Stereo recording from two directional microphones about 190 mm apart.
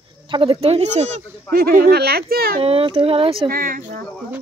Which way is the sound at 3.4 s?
50° right (ahead or behind).